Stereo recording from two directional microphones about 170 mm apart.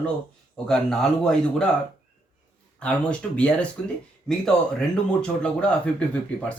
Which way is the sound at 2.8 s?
5° left (ahead or behind).